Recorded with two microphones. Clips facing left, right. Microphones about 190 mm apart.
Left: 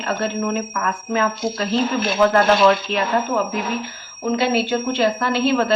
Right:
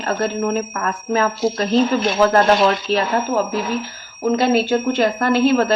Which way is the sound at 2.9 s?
35° right (ahead or behind).